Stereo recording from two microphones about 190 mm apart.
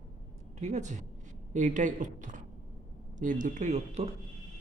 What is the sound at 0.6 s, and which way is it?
Speech, 40° right (ahead or behind).